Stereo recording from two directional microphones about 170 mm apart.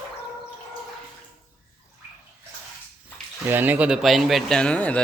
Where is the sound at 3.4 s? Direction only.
10° right (ahead or behind); by 5.0 s 5° left (ahead or behind).